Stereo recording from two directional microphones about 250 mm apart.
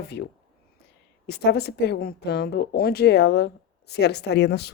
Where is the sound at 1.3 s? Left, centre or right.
Left.